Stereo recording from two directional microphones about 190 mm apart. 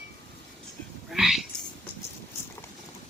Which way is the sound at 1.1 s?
Centre (ahead or behind).